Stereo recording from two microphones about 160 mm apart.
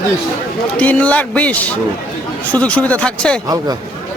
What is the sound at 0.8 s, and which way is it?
A man's voice, 10° left (ahead or behind).